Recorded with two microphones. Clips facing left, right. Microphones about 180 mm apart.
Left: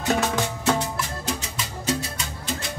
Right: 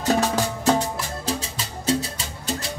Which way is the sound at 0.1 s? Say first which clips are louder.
Right 2 dB; 35° right (ahead or behind).